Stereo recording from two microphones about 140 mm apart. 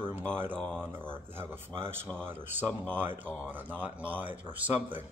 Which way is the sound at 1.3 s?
15° right (ahead or behind).